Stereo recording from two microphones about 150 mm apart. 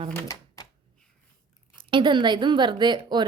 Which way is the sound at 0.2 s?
25° left (ahead or behind).